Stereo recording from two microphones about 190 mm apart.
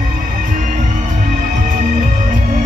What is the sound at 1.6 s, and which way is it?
Music, 45° right (ahead or behind).